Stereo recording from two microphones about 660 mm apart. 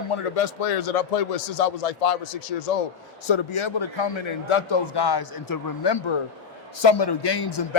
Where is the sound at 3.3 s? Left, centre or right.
Left.